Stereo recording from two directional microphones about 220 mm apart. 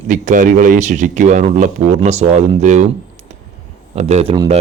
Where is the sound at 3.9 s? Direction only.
30° right (ahead or behind).